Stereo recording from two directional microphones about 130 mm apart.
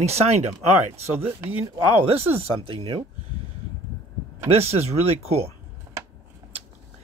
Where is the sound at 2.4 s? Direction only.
45° right (ahead or behind).